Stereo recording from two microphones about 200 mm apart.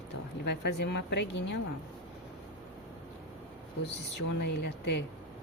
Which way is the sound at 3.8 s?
60° left (ahead or behind).